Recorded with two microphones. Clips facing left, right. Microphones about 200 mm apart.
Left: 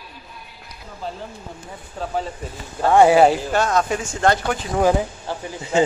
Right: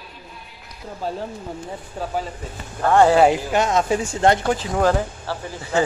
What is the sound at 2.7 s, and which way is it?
Speech, 10° left (ahead or behind).